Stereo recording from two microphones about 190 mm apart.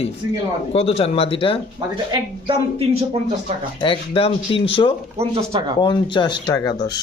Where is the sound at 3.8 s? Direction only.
30° left (ahead or behind).